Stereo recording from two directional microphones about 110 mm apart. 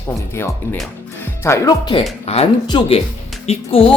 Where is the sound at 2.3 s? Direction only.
70° left (ahead or behind).